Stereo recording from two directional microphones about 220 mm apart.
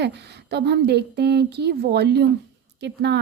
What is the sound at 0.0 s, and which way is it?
A woman's voice, 50° right (ahead or behind).